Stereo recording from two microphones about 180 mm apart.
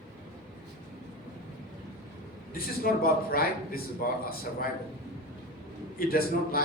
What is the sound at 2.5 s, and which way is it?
A man's voice, 55° left (ahead or behind).